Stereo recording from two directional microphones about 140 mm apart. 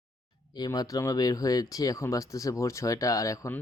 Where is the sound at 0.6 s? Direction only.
25° left (ahead or behind).